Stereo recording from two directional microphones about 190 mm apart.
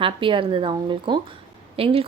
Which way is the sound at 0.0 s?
25° right (ahead or behind).